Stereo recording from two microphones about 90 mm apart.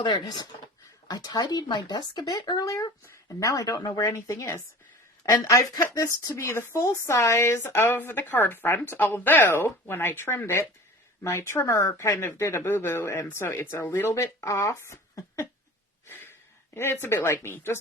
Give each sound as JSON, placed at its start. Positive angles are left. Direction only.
{"t": 0.0, "sound": "speech", "side_deg": 50}
{"t": 16.0, "sound": "a sound", "side_deg": 25}
{"t": 16.7, "sound": "speech", "side_deg": 25}